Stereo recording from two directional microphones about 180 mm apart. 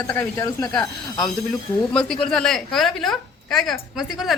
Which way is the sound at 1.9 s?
5° left (ahead or behind).